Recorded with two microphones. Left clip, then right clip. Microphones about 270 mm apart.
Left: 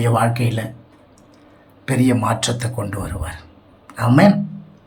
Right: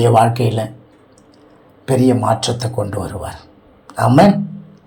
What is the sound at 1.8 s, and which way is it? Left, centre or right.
Speech, centre.